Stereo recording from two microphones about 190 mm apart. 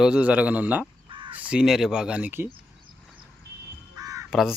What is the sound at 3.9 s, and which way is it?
Crow, 20° right (ahead or behind).